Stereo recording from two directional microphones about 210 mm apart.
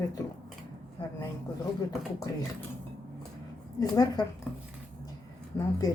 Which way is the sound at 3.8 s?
15° left (ahead or behind).